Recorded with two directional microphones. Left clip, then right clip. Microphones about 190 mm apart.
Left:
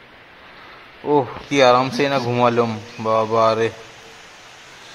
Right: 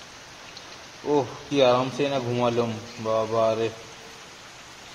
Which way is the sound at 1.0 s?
25° left (ahead or behind).